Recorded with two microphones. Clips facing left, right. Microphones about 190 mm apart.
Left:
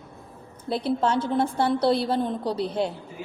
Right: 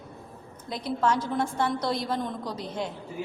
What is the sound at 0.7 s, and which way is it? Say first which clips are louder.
A woman's voice: left 3 dB; 30° left (ahead or behind).